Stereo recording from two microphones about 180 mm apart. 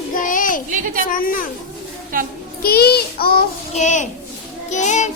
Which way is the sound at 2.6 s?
60° left (ahead or behind).